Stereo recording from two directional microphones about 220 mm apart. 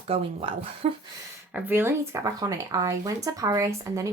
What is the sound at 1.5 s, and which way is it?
Speech, 10° right (ahead or behind).